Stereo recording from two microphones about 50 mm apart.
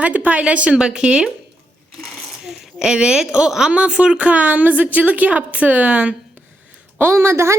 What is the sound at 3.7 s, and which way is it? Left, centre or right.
A woman's voice, right.